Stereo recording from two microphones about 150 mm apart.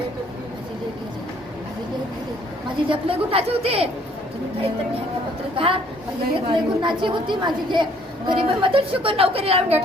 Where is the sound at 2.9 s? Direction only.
40° right (ahead or behind).